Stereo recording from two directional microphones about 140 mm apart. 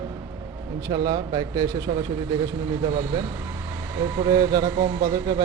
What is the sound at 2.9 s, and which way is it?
A man's voice, 35° right (ahead or behind).